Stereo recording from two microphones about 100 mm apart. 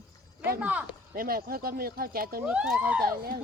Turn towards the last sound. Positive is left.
turn(degrees=-15)  # may be behind; listen again after turning